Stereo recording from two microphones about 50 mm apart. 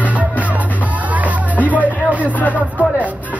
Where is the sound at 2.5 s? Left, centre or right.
Right.